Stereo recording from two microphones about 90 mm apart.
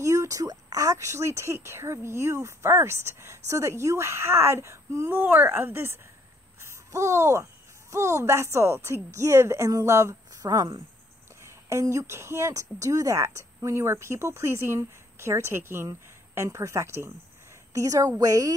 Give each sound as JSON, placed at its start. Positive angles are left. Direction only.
{"t": 0.0, "sound": "speech", "side_deg": -35}
{"t": 6.6, "sound": "a sound", "side_deg": -35}
{"t": 7.9, "sound": "speech", "side_deg": -30}